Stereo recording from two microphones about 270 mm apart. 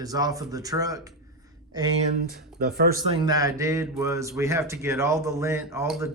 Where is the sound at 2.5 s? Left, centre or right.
Right.